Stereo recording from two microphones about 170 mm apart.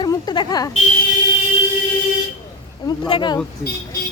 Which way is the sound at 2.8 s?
25° left (ahead or behind).